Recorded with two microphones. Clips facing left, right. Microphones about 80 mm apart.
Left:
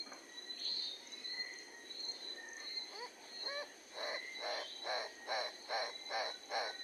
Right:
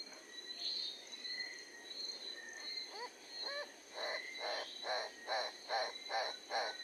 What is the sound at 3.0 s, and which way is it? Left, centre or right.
Owl, right.